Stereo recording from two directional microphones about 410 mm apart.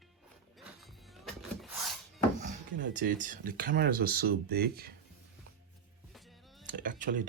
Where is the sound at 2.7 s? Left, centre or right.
Right.